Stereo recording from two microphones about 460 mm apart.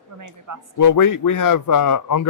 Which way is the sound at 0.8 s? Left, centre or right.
Left.